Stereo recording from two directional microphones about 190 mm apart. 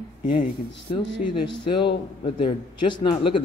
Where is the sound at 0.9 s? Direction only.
30° left (ahead or behind).